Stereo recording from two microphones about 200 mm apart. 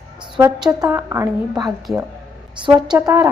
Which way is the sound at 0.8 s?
15° right (ahead or behind).